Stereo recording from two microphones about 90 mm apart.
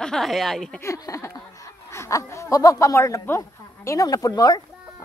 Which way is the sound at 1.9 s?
35° left (ahead or behind).